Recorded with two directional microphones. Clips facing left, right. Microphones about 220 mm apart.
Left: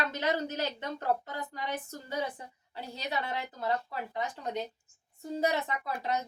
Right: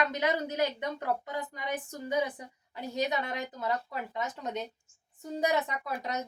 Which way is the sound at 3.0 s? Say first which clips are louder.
Right 2 dB; 20° right (ahead or behind).